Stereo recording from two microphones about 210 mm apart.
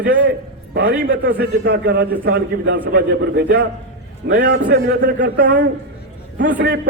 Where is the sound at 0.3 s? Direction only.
45° right (ahead or behind).